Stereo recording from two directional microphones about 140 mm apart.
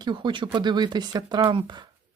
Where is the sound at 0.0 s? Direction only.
35° right (ahead or behind).